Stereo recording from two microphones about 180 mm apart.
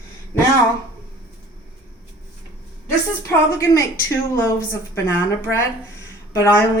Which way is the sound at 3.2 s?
15° left (ahead or behind).